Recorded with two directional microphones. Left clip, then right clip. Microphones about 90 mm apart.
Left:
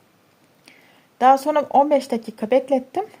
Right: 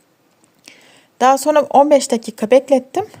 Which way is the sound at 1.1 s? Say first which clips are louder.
Right 3 dB; 35° right (ahead or behind).